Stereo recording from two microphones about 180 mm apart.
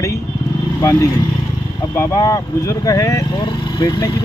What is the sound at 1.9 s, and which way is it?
Speech, 20° left (ahead or behind).